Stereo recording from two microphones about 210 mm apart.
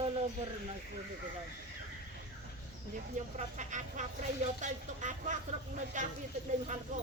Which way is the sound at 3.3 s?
35° right (ahead or behind).